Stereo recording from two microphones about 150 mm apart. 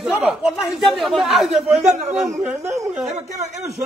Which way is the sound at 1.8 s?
50° right (ahead or behind).